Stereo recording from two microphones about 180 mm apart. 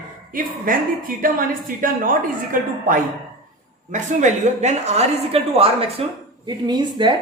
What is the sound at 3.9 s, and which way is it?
A woman's voice, 40° right (ahead or behind).